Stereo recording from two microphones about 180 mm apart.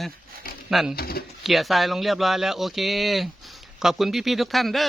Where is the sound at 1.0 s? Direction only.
60° left (ahead or behind).